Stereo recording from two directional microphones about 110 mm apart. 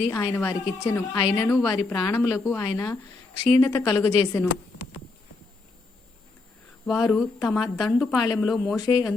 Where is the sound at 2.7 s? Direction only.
35° left (ahead or behind).